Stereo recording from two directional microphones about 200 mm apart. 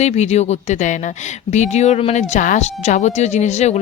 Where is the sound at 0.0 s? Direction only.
35° left (ahead or behind).